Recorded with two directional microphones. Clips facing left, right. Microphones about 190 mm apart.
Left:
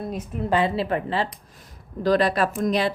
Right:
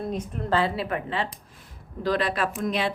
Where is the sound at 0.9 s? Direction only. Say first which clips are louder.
Left 4 dB; 35° left (ahead or behind).